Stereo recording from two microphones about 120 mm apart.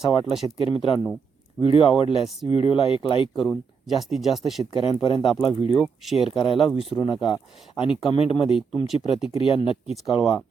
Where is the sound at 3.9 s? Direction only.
Centre (ahead or behind).